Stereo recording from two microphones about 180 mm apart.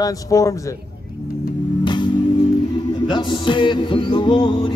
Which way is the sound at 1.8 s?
25° left (ahead or behind).